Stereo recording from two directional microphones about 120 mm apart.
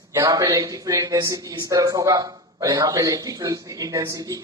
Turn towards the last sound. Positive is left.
turn(degrees=-30)  # may be behind; listen again after turning